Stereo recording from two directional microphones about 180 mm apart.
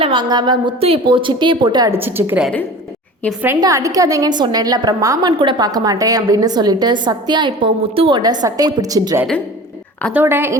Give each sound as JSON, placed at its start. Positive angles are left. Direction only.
{"t": 0.0, "sound": "a woman's voice", "side_deg": -25}